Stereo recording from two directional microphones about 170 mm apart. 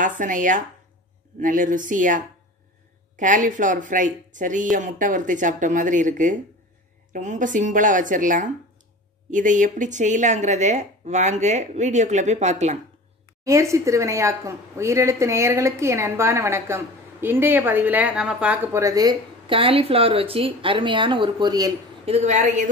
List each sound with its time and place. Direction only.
0.2 s a woman's voice: 50° right (ahead or behind)
13.4 s speech: 20° right (ahead or behind)
22.0 s a woman's voice: 40° right (ahead or behind)